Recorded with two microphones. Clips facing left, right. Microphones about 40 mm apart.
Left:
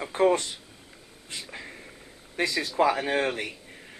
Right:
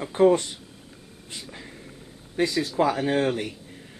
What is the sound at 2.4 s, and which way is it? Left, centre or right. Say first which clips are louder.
Speech: right 2 dB; left.